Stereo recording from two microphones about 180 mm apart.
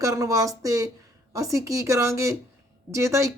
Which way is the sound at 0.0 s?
20° right (ahead or behind).